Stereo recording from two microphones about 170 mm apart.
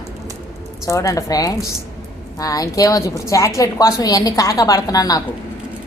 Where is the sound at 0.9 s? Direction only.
20° left (ahead or behind).